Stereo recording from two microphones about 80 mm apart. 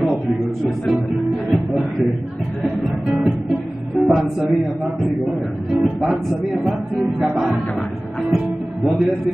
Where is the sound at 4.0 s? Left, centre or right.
Centre.